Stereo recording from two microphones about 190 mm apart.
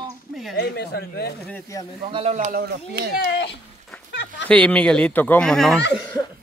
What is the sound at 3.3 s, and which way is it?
Speech, 60° left (ahead or behind).